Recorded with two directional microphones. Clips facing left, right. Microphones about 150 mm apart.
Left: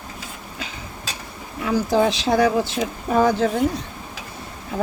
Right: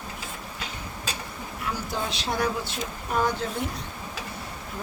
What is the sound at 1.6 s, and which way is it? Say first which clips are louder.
Speech: left 13 dB; 90° left.